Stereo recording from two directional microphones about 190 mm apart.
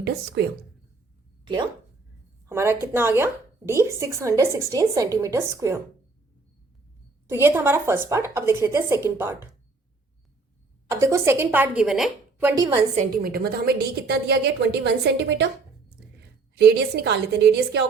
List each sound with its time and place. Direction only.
0.0 s a woman's voice: 60° right (ahead or behind)
2.5 s a woman's voice: 15° right (ahead or behind)
7.3 s a woman's voice: 10° right (ahead or behind)
10.8 s a woman's voice: 15° right (ahead or behind)
13.0 s a woman's voice: 50° right (ahead or behind); by 15.4 s 70° right (ahead or behind)
16.6 s a woman's voice: 60° right (ahead or behind)